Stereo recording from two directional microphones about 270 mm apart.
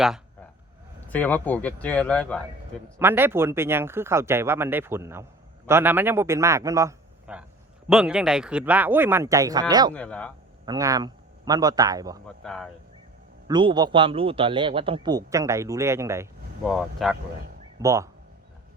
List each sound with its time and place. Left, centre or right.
1.0 s speech: centre
3.0 s a man's voice: centre
9.9 s speech: centre
10.7 s a man's voice: centre
12.4 s speech: centre
13.5 s a man's voice: centre
16.6 s speech: centre
17.7 s a man's voice: centre